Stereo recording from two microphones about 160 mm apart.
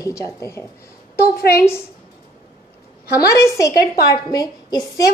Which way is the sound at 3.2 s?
20° left (ahead or behind).